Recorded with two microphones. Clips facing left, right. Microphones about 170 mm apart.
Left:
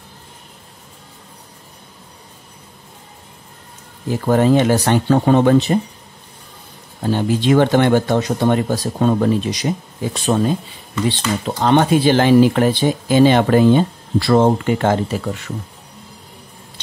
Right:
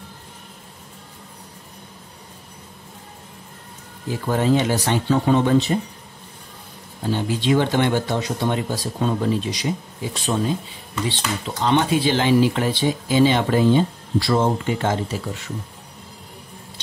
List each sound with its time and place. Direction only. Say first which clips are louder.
4.3 s speech: left 6 dB; 55° left (ahead or behind)
7.0 s speech: left 5 dB; 55° left (ahead or behind)